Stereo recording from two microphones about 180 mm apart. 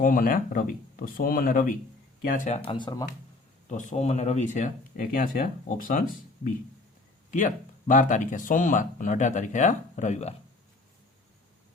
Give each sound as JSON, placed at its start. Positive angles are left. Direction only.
{"t": 0.0, "sound": "speech", "side_deg": 50}
{"t": 2.6, "sound": "speech", "side_deg": 25}
{"t": 3.7, "sound": "speech", "side_deg": 45}
{"t": 7.3, "sound": "speech", "side_deg": 45}